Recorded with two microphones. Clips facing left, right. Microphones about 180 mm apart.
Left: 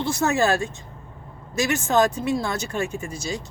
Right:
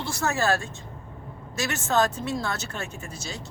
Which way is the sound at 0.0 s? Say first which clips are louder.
Left 5 dB; 20° left (ahead or behind).